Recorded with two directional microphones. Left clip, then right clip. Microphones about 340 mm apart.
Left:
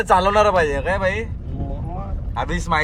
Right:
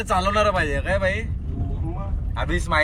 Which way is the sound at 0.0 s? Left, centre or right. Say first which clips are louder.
Left 5 dB; left.